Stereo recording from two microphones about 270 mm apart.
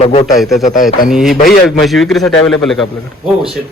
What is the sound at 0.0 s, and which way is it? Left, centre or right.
Speech, left.